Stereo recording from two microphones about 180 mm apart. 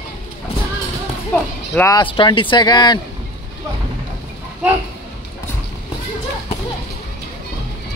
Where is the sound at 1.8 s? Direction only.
20° left (ahead or behind).